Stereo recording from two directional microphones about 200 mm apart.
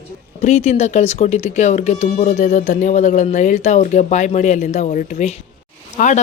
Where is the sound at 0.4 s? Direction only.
35° left (ahead or behind).